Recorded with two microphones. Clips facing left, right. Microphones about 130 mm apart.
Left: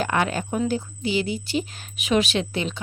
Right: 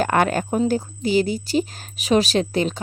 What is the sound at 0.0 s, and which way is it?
Speech, 50° right (ahead or behind).